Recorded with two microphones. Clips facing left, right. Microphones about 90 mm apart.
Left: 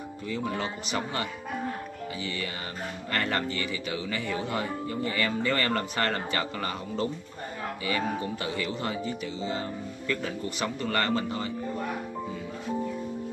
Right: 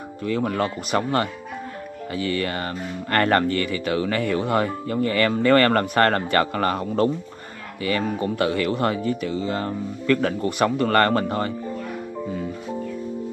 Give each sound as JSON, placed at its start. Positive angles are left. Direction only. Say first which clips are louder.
{"t": 0.2, "sound": "speech", "louder": "right 8 dB", "side_deg": -65}